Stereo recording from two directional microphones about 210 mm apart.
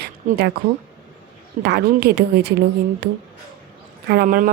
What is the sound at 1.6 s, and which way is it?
Speech, 50° right (ahead or behind).